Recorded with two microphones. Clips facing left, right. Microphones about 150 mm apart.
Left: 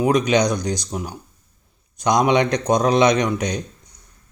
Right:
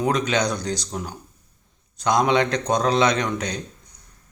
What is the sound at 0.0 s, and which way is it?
Speech, 15° left (ahead or behind).